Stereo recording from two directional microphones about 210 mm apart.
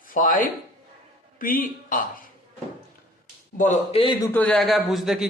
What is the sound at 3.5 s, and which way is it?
Speech, 35° left (ahead or behind).